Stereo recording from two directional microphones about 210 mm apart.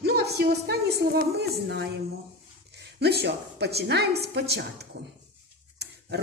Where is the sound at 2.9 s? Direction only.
50° right (ahead or behind).